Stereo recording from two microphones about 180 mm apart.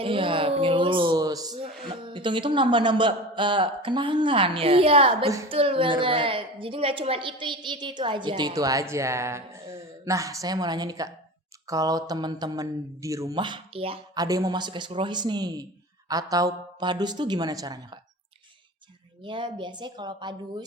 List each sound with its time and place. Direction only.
0.0 s a sound: 30° right (ahead or behind)
1.9 s a woman's voice: 25° right (ahead or behind)
14.2 s a woman's voice: 20° right (ahead or behind)
19.2 s a woman's voice: 25° right (ahead or behind)